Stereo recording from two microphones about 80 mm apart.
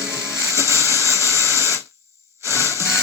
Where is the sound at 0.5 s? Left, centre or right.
Right.